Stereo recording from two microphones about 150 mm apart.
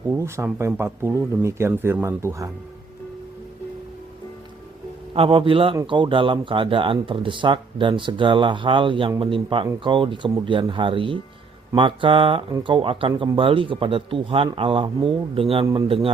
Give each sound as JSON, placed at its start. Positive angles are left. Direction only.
{"t": 0.1, "sound": "speech", "side_deg": -20}
{"t": 5.1, "sound": "speech", "side_deg": -40}